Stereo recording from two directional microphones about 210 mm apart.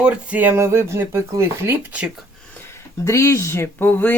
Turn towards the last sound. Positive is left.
turn(degrees=10)  # may be behind; listen again after turning